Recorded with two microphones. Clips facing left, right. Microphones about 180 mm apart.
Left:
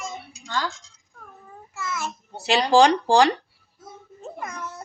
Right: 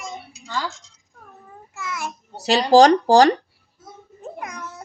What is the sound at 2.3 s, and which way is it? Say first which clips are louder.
Speech: right 4 dB; 40° right (ahead or behind).